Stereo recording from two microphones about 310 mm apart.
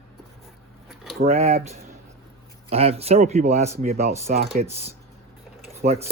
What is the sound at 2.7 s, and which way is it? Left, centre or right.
Speech, centre.